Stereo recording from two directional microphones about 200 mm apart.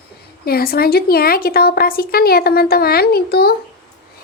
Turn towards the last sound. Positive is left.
turn(degrees=50)  # may be behind; listen again after turning